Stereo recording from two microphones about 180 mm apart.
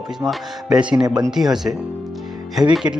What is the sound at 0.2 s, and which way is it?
Speech, centre (ahead or behind).